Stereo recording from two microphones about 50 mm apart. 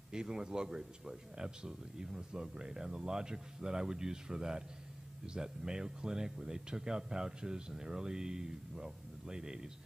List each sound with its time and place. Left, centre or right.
0.1 s speech: centre